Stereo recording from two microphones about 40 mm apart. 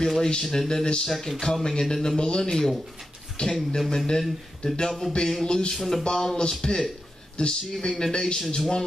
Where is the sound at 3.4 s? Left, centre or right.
Left.